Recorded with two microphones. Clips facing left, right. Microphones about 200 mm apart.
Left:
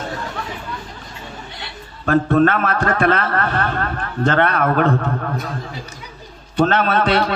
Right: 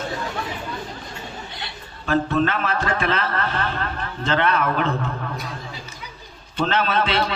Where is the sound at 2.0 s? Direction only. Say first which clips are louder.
Left 6 dB; 50° left (ahead or behind).